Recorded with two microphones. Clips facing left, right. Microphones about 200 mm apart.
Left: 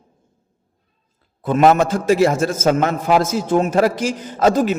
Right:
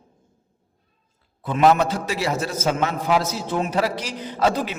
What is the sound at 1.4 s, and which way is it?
A man's voice, 50° left (ahead or behind).